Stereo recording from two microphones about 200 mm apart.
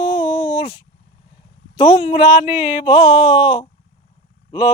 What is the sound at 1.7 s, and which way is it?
Speech, 20° left (ahead or behind).